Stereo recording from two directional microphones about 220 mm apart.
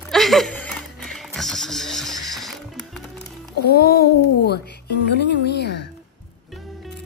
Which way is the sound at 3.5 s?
45° left (ahead or behind).